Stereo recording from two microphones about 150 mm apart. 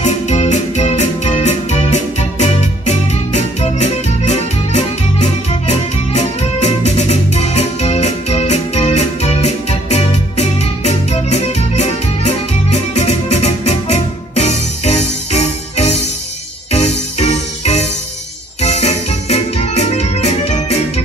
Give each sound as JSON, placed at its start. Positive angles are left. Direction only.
{"t": 0.0, "sound": "music", "side_deg": 50}